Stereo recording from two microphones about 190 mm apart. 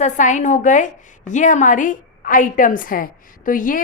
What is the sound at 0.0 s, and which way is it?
A woman's voice, 40° left (ahead or behind).